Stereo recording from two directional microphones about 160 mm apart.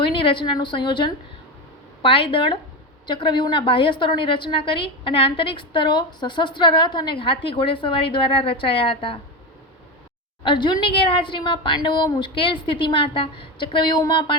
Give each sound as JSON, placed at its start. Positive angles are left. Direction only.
{"t": 0.0, "sound": "a woman's voice", "side_deg": 30}
{"t": 10.4, "sound": "a woman's voice", "side_deg": 30}